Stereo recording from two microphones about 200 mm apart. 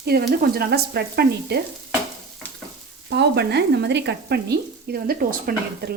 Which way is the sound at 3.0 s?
60° right (ahead or behind).